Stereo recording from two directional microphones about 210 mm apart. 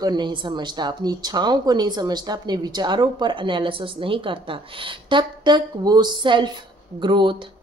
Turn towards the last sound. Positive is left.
turn(degrees=-20)  # may be behind; listen again after turning